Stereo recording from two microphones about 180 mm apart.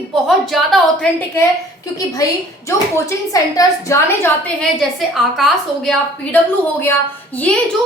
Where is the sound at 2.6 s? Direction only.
15° left (ahead or behind).